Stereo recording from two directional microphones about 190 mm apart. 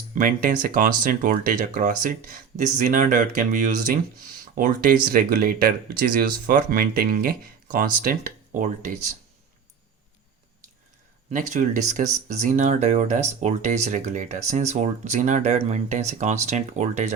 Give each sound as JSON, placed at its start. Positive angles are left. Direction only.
{"t": 0.1, "sound": "speech", "side_deg": -45}
{"t": 11.3, "sound": "speech", "side_deg": -40}